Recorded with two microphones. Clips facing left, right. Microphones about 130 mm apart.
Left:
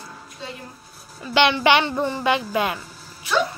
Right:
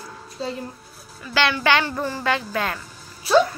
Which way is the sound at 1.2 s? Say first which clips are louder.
Left 4 dB; 20° left (ahead or behind).